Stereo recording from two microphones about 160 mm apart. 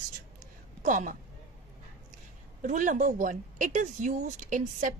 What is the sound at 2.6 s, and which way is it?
Speech, 55° right (ahead or behind).